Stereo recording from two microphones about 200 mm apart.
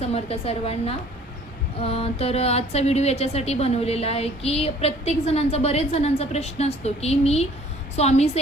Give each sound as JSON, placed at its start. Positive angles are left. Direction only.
{"t": 0.0, "sound": "a woman's voice", "side_deg": 30}